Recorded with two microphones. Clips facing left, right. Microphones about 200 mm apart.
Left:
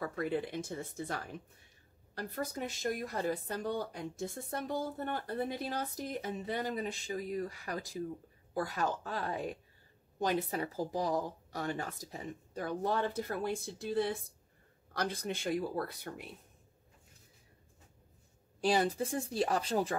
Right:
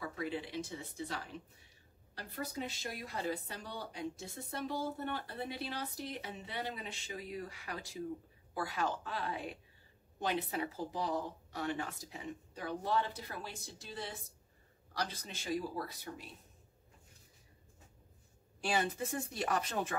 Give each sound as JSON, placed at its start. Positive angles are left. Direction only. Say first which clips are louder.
{"t": 0.0, "sound": "speech", "louder": "left 5 dB", "side_deg": 50}
{"t": 18.6, "sound": "speech", "louder": "left 5 dB", "side_deg": 35}